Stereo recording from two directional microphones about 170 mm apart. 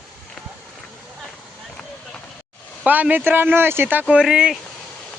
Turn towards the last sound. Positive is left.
turn(degrees=-5)  # may be behind; listen again after turning